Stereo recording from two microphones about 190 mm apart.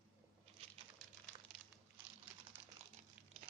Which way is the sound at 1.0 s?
5° left (ahead or behind).